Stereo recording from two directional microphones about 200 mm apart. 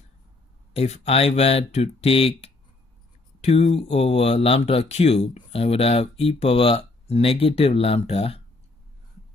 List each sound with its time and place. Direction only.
0.7 s speech: 30° left (ahead or behind)